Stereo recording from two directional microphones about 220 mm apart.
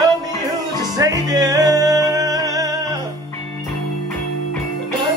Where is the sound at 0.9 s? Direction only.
15° right (ahead or behind).